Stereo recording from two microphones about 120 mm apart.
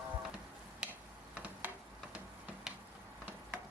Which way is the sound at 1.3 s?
10° right (ahead or behind).